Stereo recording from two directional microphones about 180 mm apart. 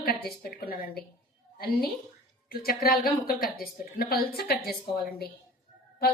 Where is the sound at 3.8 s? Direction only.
55° left (ahead or behind).